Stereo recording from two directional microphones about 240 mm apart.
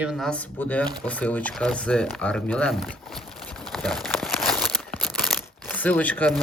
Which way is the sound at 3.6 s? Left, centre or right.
Centre.